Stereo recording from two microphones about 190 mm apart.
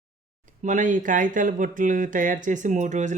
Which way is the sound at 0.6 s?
40° right (ahead or behind).